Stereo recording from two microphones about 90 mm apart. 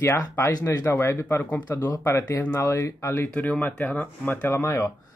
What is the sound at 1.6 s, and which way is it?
Speech, 45° left (ahead or behind).